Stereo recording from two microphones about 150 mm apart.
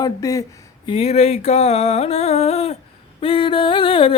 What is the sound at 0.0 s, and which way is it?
Speech, 20° left (ahead or behind).